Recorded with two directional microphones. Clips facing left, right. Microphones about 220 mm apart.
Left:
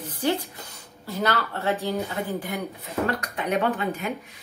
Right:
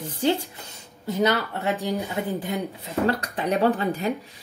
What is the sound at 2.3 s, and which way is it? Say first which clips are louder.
Speech: right 2 dB; 25° right (ahead or behind).